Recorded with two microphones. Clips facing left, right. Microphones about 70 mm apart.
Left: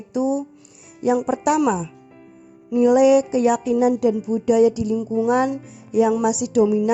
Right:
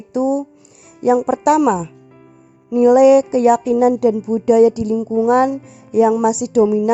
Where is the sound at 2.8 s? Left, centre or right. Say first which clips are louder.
Right 5 dB; right.